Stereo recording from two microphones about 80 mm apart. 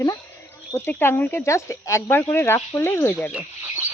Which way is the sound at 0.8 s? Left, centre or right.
Left.